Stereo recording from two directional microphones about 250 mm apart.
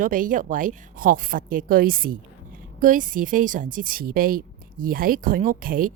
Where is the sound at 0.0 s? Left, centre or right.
Right.